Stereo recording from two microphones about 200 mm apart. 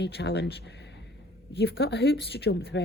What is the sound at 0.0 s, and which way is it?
Speech, 60° left (ahead or behind).